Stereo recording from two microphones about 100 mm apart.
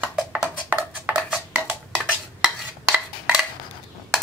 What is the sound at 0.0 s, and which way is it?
Music, 10° right (ahead or behind).